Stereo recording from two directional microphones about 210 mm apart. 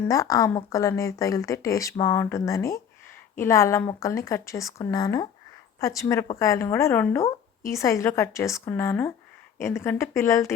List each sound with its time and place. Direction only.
0.0 s a woman's voice: 15° left (ahead or behind)